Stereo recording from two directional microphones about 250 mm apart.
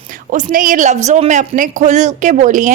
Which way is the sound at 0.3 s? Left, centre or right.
Right.